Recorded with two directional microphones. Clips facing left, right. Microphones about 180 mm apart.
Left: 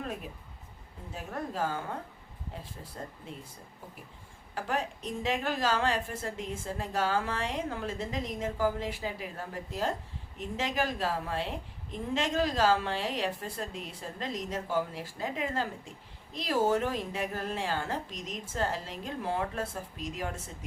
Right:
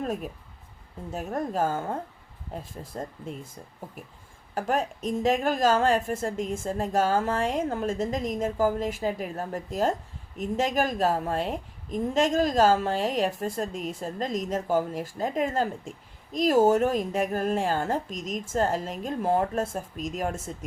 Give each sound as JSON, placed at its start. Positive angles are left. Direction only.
{"t": 0.0, "sound": "a woman's voice", "side_deg": -45}
{"t": 4.5, "sound": "a woman's voice", "side_deg": -45}